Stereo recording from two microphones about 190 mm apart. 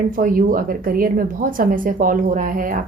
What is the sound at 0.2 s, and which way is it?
A woman's voice, 45° right (ahead or behind).